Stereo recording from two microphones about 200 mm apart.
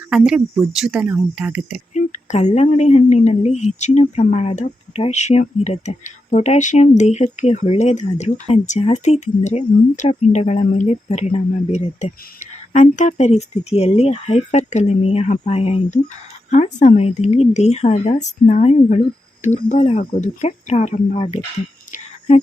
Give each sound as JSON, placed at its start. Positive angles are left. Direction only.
{"t": 0.1, "sound": "speech", "side_deg": -5}
{"t": 1.9, "sound": "a sound", "side_deg": 35}
{"t": 2.6, "sound": "speech", "side_deg": 35}